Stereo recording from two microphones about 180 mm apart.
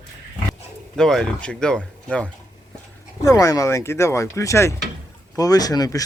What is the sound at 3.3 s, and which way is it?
Speech, 20° left (ahead or behind).